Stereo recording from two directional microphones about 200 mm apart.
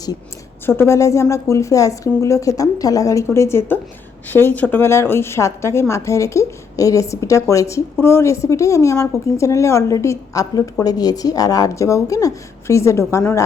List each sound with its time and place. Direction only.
0.6 s a woman's voice: 10° left (ahead or behind)